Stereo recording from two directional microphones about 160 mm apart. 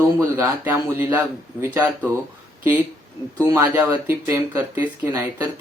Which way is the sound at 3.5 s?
15° right (ahead or behind).